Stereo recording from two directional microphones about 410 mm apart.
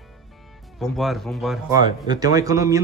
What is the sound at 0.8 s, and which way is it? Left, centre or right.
Speech, centre.